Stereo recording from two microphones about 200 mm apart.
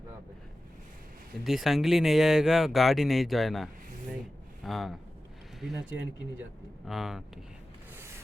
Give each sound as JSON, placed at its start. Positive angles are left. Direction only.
{"t": 1.5, "sound": "speech", "side_deg": 0}
{"t": 6.8, "sound": "speech", "side_deg": 0}
{"t": 7.9, "sound": "rub", "side_deg": -15}